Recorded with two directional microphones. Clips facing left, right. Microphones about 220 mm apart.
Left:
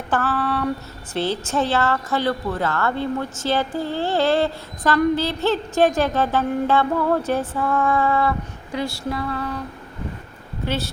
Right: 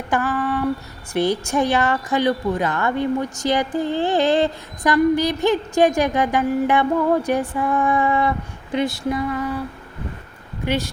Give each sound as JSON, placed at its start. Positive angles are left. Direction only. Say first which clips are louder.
{"t": 0.1, "sound": "female singing", "louder": "right 1 dB", "side_deg": -15}
{"t": 1.1, "sound": "a woman's voice", "louder": "right 3 dB", "side_deg": -15}